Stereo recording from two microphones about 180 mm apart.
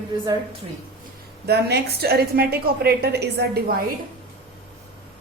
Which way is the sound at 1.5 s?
65° right (ahead or behind).